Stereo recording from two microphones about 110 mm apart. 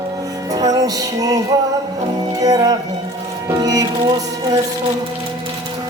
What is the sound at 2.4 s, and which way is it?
Music, 35° right (ahead or behind).